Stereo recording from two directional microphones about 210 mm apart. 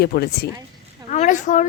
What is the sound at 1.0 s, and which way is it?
Speech, 35° left (ahead or behind).